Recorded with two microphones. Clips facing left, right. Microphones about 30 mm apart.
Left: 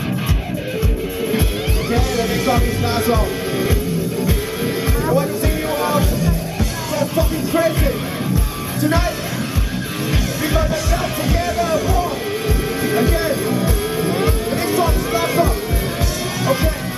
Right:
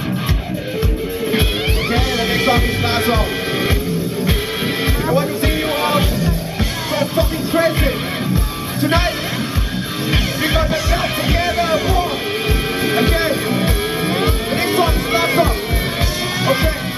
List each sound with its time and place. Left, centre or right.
1.9 s music: right
5.1 s music: right
10.1 s music: right
11.2 s a sound: right
12.8 s music: right